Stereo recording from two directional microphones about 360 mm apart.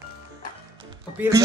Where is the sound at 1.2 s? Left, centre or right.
Centre.